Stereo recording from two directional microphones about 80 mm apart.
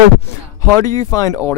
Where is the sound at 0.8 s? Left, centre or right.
Left.